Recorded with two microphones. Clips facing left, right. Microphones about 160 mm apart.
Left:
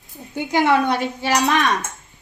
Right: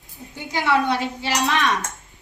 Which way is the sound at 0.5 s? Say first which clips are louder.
Left 3 dB; 50° left (ahead or behind).